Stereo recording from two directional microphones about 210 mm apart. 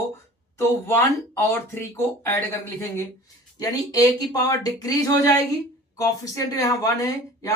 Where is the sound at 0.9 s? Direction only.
10° left (ahead or behind).